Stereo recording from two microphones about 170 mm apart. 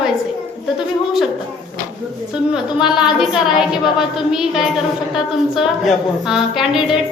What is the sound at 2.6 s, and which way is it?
Speech, 25° left (ahead or behind).